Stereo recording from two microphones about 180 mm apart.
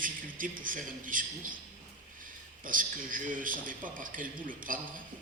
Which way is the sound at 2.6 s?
50° right (ahead or behind).